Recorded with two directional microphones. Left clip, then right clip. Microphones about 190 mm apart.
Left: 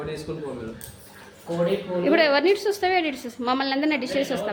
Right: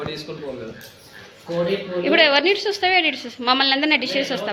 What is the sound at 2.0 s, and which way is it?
A woman's voice, 20° left (ahead or behind).